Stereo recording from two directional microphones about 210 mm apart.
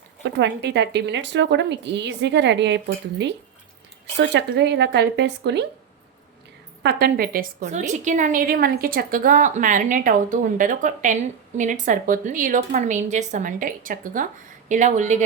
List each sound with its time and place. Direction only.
0.3 s a woman's voice: 55° right (ahead or behind)
6.8 s a woman's voice: 45° right (ahead or behind)